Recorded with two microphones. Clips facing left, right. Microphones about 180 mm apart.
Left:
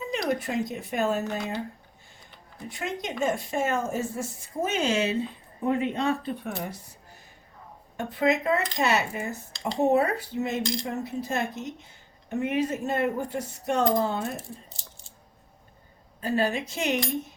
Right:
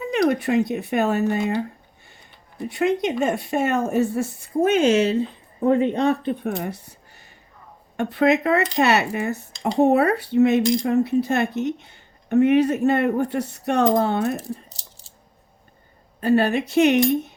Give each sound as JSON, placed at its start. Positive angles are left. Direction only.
{"t": 0.0, "sound": "speech", "side_deg": -65}
{"t": 6.4, "sound": "speech", "side_deg": -65}
{"t": 16.2, "sound": "speech", "side_deg": -65}